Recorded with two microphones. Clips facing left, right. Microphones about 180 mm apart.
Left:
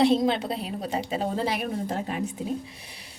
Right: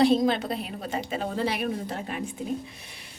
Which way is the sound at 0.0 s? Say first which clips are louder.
Even; 25° left (ahead or behind).